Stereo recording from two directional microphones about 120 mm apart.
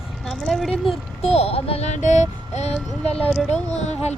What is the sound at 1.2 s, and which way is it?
Speech, 60° left (ahead or behind).